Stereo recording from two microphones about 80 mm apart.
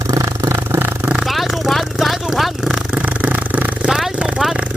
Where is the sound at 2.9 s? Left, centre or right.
Centre.